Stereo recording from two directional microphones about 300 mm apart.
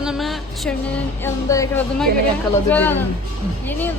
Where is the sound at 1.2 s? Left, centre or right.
Centre.